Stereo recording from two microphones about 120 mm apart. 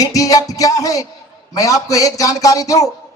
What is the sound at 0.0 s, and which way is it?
A man's voice, 30° left (ahead or behind).